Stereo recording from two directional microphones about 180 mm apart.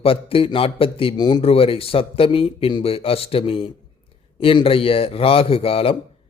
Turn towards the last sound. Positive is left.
turn(degrees=30)  # may be behind; listen again after turning